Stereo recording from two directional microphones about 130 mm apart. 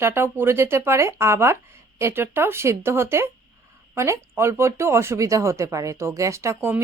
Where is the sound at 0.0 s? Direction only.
20° right (ahead or behind).